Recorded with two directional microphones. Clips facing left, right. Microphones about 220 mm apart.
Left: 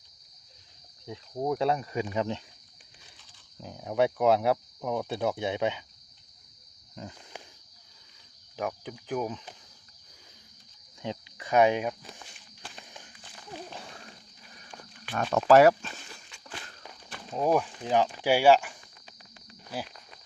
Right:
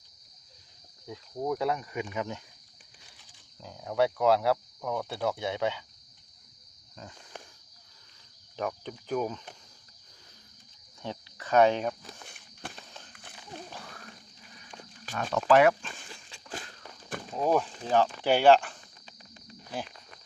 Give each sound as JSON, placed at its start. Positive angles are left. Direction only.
{"t": 1.0, "sound": "speech", "side_deg": 25}
{"t": 3.6, "sound": "speech", "side_deg": 20}
{"t": 7.0, "sound": "speech", "side_deg": 25}
{"t": 8.5, "sound": "speech", "side_deg": 10}
{"t": 11.0, "sound": "speech", "side_deg": 15}
{"t": 12.8, "sound": "a sound", "side_deg": 15}
{"t": 15.1, "sound": "speech", "side_deg": 45}
{"t": 17.3, "sound": "speech", "side_deg": 10}